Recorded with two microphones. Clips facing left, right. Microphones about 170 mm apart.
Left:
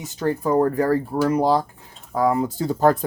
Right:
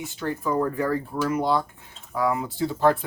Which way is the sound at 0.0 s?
40° left (ahead or behind).